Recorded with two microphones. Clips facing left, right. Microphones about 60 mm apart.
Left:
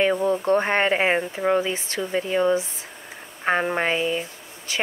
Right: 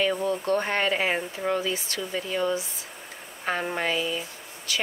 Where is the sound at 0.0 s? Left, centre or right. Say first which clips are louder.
Left 5 dB; left.